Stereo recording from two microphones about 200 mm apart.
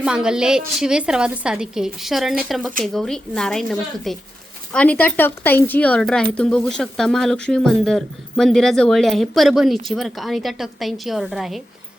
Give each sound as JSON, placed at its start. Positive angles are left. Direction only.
{"t": 0.0, "sound": "speech", "side_deg": -5}